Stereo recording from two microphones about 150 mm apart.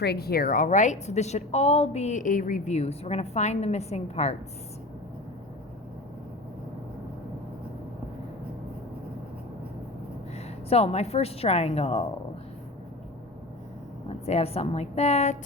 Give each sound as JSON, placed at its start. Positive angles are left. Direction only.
{"t": 0.0, "sound": "a woman's voice", "side_deg": 90}
{"t": 10.3, "sound": "a woman's voice", "side_deg": 45}
{"t": 14.3, "sound": "a woman's voice", "side_deg": 45}